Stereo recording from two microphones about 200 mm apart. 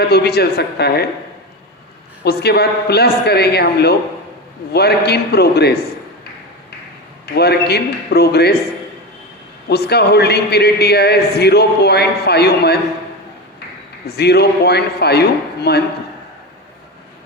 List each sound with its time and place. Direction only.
0.0 s a man's voice: 55° left (ahead or behind)
2.2 s a man's voice: 55° left (ahead or behind)
7.3 s a man's voice: 55° left (ahead or behind)
9.6 s a man's voice: 55° left (ahead or behind)
14.1 s a man's voice: 55° left (ahead or behind)